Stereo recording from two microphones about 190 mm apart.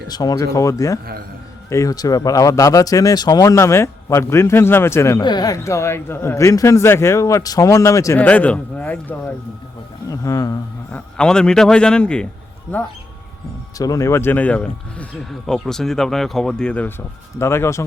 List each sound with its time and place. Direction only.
0.1 s speech: 20° left (ahead or behind)
10.1 s a sound: 15° left (ahead or behind)
11.2 s speech: 5° left (ahead or behind)
13.7 s speech: 20° left (ahead or behind)